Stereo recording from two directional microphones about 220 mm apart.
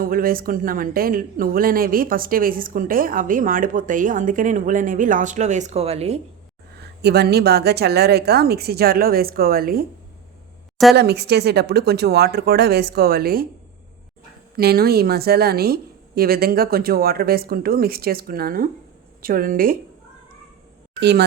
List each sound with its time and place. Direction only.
0.0 s speech: 40° right (ahead or behind)
7.0 s a woman's voice: 45° right (ahead or behind)
10.9 s a woman's voice: 50° right (ahead or behind)
14.5 s a woman's voice: 45° right (ahead or behind)
21.0 s a woman's voice: 50° right (ahead or behind)